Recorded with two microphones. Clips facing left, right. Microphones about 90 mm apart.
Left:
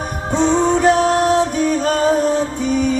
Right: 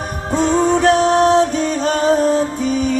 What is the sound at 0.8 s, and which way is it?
Music, 10° left (ahead or behind).